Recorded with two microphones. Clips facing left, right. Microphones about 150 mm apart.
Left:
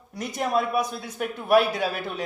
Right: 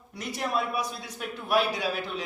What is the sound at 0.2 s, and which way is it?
A man's voice, 45° left (ahead or behind).